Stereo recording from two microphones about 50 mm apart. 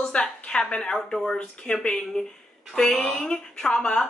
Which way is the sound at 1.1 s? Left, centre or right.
Centre.